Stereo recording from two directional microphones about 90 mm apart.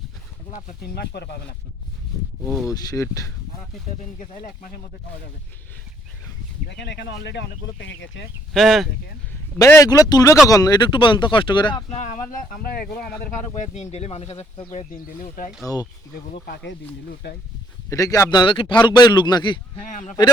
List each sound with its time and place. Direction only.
2.4 s speech: centre (ahead or behind)
2.6 s speech: 45° left (ahead or behind)
8.5 s speech: centre (ahead or behind)
9.8 s a man's voice: 40° left (ahead or behind); by 11.8 s 65° left (ahead or behind)
15.6 s speech: 45° left (ahead or behind)
17.8 s speech: 40° left (ahead or behind)
18.3 s a man's voice: 65° left (ahead or behind)